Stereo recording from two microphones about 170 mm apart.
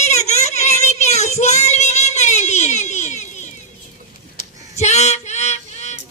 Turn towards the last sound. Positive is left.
turn(degrees=40)  # may be behind; listen again after turning